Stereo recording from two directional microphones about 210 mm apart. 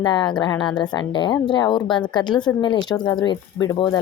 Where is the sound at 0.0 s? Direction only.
20° left (ahead or behind).